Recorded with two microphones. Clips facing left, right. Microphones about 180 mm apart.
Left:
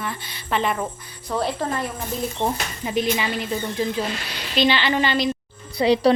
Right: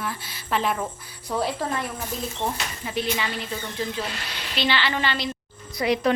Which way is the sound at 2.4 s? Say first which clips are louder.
Left 4 dB; 20° left (ahead or behind).